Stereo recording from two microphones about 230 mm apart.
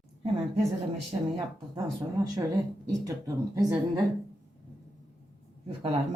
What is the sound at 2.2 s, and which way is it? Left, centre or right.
Speech, centre.